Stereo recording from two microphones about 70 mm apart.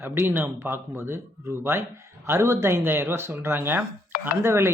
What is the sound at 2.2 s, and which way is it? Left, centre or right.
Speech, right.